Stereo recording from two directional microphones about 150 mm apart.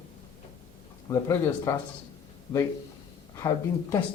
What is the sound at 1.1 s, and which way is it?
Speech, 20° left (ahead or behind).